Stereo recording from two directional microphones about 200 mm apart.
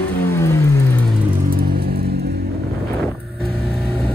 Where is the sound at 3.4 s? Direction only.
Centre (ahead or behind).